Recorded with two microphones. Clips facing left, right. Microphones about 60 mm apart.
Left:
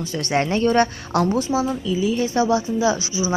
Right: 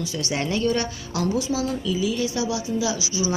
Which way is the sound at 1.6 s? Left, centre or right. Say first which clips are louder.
Left 3 dB; left.